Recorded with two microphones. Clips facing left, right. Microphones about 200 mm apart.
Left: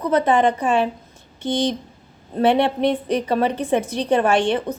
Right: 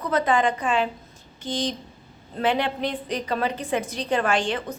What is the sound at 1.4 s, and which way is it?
Speech, 65° left (ahead or behind).